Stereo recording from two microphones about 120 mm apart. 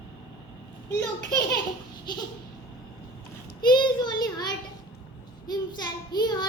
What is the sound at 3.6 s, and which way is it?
Child singing, 40° left (ahead or behind).